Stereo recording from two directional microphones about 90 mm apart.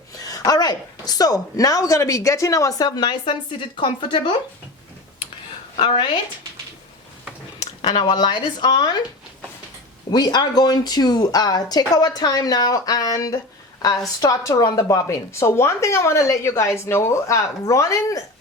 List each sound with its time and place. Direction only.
0.1 s a woman's voice: 40° left (ahead or behind)
3.1 s a woman's voice: 70° left (ahead or behind)
5.8 s a woman's voice: 75° left (ahead or behind)
7.8 s speech: 60° left (ahead or behind)
10.1 s a woman's voice: 50° left (ahead or behind)